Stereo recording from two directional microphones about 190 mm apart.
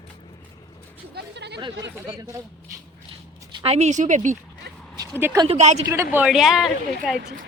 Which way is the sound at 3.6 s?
35° right (ahead or behind).